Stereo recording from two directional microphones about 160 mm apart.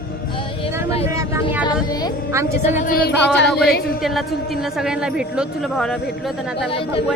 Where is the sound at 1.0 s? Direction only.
20° right (ahead or behind).